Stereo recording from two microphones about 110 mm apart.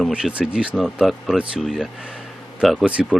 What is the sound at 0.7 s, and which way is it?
Speech, centre (ahead or behind).